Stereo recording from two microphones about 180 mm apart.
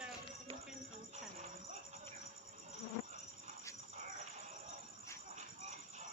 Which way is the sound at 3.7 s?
15° left (ahead or behind).